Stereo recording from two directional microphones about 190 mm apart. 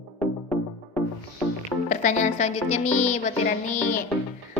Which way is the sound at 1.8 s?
40° left (ahead or behind).